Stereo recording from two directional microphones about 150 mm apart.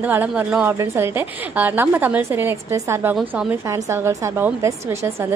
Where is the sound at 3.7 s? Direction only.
20° right (ahead or behind).